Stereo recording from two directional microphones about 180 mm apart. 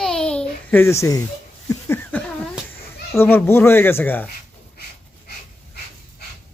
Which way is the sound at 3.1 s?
15° left (ahead or behind).